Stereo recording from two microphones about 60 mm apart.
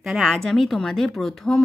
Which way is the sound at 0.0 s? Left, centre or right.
Centre.